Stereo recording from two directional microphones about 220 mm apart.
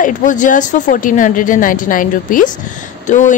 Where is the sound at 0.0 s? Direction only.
35° left (ahead or behind).